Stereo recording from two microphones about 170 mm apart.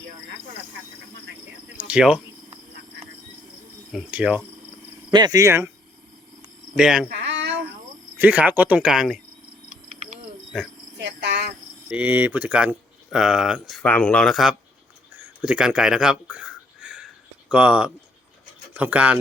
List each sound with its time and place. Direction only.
1.8 s speech: 5° right (ahead or behind)
3.9 s speech: 5° right (ahead or behind)
5.1 s speech: 20° right (ahead or behind)
6.7 s speech: 5° right (ahead or behind)
7.1 s a sound: 90° right
8.2 s speech: 10° right (ahead or behind)
9.6 s a sound: 40° right (ahead or behind)
10.9 s cricket: 80° right
11.9 s speech: 10° right (ahead or behind)